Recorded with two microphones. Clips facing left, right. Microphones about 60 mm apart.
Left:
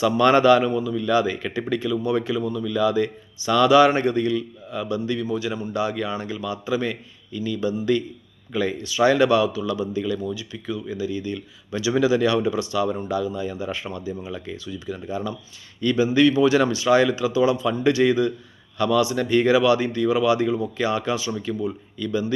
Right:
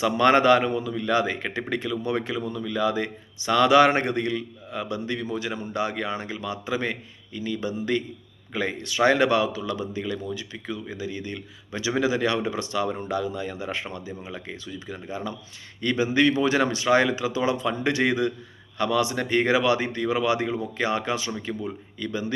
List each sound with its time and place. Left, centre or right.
0.0 s a man's voice: right